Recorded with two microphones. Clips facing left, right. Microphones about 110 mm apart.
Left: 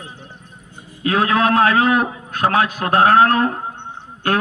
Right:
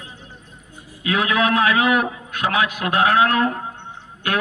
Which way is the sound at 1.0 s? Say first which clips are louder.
Left 3 dB; 35° left (ahead or behind).